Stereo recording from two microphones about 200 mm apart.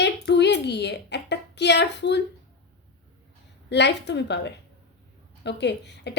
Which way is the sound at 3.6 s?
60° left (ahead or behind).